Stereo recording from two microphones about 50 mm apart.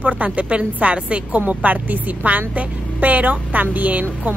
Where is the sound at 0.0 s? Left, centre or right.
Right.